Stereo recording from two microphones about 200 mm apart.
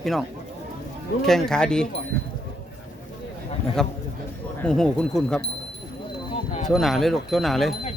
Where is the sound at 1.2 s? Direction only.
Centre (ahead or behind).